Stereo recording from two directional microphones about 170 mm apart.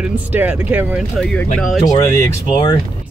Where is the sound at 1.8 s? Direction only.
15° left (ahead or behind).